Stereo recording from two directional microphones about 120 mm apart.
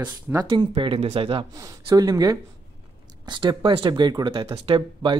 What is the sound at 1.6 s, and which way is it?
Speech, 25° right (ahead or behind).